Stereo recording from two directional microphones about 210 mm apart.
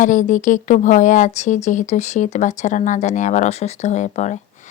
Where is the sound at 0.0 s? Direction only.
35° left (ahead or behind).